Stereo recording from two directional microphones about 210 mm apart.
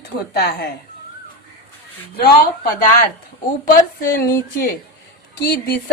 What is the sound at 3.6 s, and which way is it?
A woman's voice, 45° left (ahead or behind).